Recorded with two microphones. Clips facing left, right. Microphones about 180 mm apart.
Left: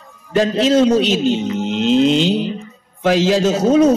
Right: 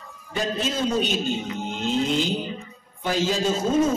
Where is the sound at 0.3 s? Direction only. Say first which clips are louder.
Left 12 dB; 80° left.